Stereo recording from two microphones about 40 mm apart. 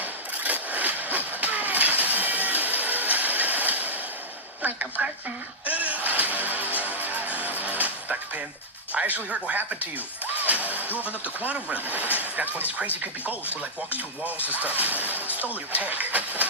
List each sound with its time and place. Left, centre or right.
0.0 s vehicle: right
4.6 s a sound: right
5.6 s music: right
9.0 s speech: right
14.5 s speech: right